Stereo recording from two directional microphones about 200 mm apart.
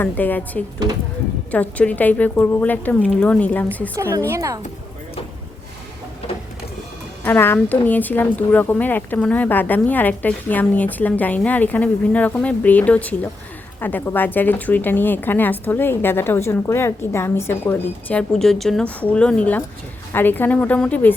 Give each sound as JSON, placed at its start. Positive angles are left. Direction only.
{"t": 0.0, "sound": "a woman's voice", "side_deg": 10}
{"t": 3.9, "sound": "a woman's voice", "side_deg": -15}
{"t": 7.3, "sound": "a woman's voice", "side_deg": 10}